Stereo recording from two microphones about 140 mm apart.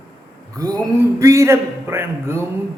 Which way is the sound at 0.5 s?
25° right (ahead or behind).